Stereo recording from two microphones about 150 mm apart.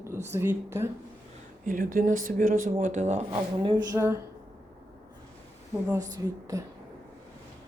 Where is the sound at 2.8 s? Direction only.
50° right (ahead or behind).